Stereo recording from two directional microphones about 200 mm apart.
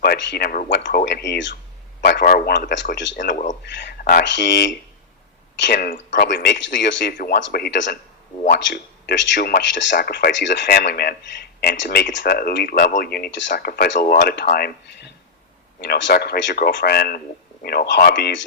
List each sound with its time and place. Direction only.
0.0 s speech: 50° left (ahead or behind)
2.0 s speech: 50° left (ahead or behind)
3.6 s speech: 55° left (ahead or behind)
4.2 s speech: 60° left (ahead or behind)
7.1 s speech: 45° left (ahead or behind)
7.3 s speech: 55° left (ahead or behind)
9.9 s speech: 45° left (ahead or behind); by 18.4 s 65° left (ahead or behind)